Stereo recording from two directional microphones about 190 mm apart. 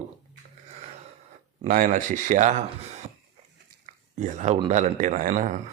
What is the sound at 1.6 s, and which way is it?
Speech, 45° right (ahead or behind).